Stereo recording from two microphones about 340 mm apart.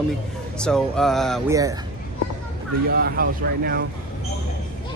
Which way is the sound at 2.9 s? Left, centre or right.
Right.